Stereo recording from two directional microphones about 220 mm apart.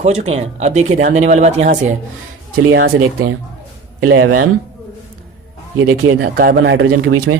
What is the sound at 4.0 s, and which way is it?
Speech, 70° right (ahead or behind).